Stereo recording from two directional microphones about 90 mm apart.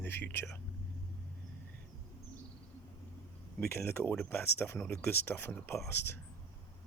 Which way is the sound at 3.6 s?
25° left (ahead or behind).